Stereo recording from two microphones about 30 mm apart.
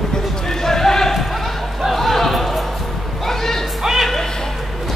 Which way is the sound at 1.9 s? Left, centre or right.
Centre.